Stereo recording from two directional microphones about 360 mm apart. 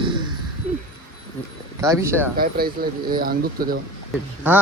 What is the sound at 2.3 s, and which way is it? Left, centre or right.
Speech, right.